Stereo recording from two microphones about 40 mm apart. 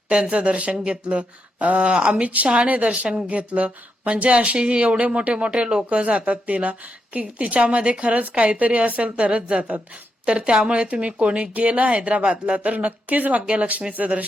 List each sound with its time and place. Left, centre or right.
0.1 s a woman's voice: right
13.4 s speech: right